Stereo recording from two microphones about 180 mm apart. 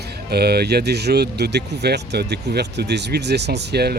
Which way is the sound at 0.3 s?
60° right (ahead or behind).